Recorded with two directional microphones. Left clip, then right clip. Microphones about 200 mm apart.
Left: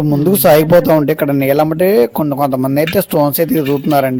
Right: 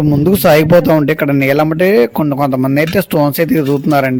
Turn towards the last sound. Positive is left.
turn(degrees=0)  # may be behind; listen again after turning